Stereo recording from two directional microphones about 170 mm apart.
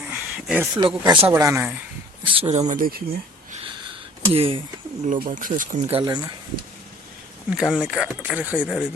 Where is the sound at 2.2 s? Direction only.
35° right (ahead or behind); by 3.0 s 55° right (ahead or behind).